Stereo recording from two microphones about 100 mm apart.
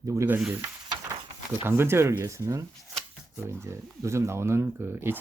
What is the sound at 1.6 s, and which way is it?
Speech, 25° right (ahead or behind).